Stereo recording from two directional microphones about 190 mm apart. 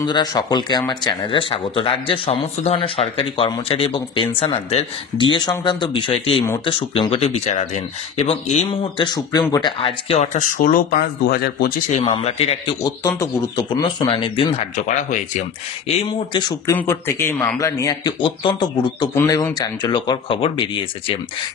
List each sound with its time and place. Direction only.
0.0 s speech: 20° left (ahead or behind); by 11.7 s 55° left (ahead or behind)
12.0 s speech: 30° left (ahead or behind)
13.6 s speech: 20° left (ahead or behind)
14.9 s speech: 40° left (ahead or behind)
16.1 s speech: 20° left (ahead or behind)